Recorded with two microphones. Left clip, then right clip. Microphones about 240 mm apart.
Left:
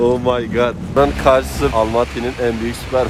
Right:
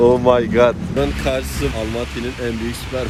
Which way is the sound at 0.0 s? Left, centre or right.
Centre.